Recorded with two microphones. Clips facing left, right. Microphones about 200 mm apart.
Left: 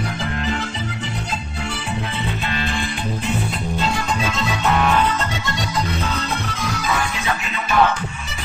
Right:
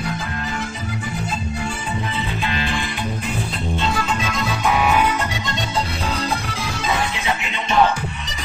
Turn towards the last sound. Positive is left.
turn(degrees=-15)  # may be behind; listen again after turning